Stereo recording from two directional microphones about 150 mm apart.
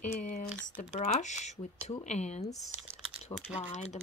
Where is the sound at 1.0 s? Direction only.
50° left (ahead or behind).